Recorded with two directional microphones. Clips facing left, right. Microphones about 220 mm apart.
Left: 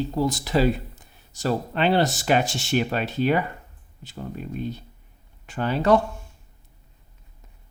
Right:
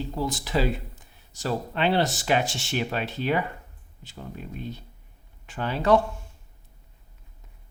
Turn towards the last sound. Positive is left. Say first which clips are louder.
# left 3 dB
turn(degrees=45)  # may be behind; listen again after turning